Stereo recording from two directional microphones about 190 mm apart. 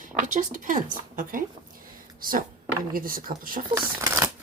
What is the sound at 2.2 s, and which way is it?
Speech, 50° right (ahead or behind).